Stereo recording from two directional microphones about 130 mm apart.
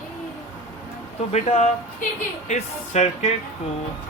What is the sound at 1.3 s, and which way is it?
A man's voice, 60° left (ahead or behind).